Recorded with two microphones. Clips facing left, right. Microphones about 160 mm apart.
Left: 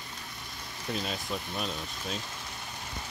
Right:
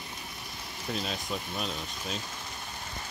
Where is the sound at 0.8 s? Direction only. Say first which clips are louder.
Even; centre (ahead or behind).